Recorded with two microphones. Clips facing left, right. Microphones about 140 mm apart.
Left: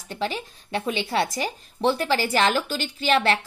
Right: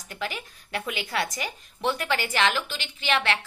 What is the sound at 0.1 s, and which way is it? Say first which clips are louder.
A woman's voice: left 5 dB; 30° left (ahead or behind).